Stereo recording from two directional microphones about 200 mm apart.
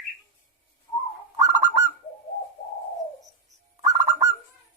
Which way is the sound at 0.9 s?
15° left (ahead or behind).